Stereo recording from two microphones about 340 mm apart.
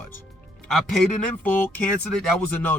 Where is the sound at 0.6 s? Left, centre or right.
Centre.